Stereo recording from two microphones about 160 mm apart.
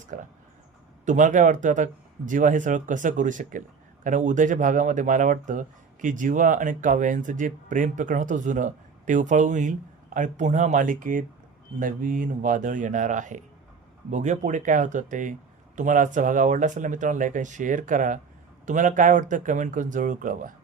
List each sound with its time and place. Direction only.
0.1 s speech: 55° right (ahead or behind)